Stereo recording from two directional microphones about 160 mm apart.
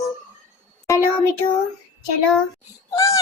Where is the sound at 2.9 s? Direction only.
20° left (ahead or behind).